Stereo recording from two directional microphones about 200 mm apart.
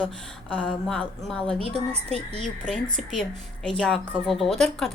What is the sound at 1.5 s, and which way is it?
Speech, 30° right (ahead or behind).